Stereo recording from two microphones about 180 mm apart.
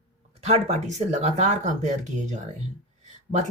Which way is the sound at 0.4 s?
35° right (ahead or behind).